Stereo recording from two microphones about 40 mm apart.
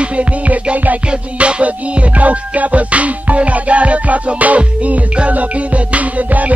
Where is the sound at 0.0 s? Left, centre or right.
Right.